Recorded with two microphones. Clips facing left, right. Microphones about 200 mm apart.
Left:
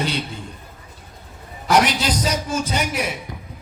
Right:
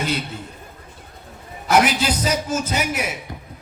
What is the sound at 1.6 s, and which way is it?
A man's voice, 5° right (ahead or behind).